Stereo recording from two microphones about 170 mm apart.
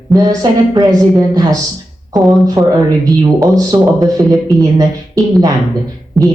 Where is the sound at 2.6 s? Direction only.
20° right (ahead or behind).